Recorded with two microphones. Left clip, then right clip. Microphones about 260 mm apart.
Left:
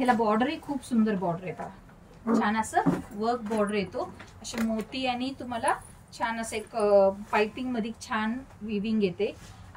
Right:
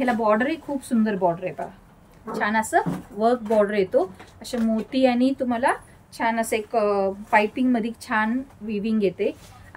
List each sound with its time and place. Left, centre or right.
0.0 s a woman's voice: centre